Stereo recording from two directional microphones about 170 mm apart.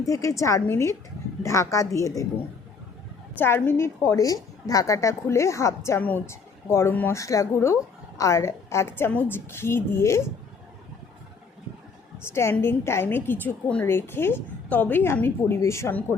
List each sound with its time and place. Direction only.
0.0 s a woman's voice: 20° left (ahead or behind)
3.3 s a woman's voice: 10° left (ahead or behind)
12.2 s a woman's voice: 15° left (ahead or behind)